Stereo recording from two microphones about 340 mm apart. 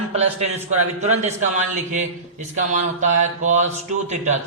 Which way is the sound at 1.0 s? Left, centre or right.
Centre.